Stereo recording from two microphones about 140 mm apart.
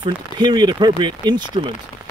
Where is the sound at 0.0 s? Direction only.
30° right (ahead or behind).